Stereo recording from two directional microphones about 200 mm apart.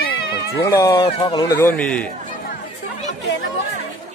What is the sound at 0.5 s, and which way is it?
Speech, 15° left (ahead or behind).